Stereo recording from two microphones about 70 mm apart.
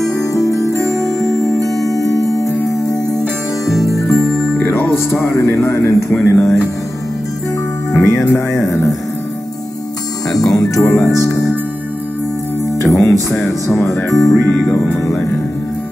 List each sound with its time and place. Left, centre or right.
0.3 s zither: left
1.6 s music: centre
2.1 s music: left
5.6 s speech: left
7.9 s speech: left
10.3 s speech: left
10.8 s music: left
12.8 s speech: left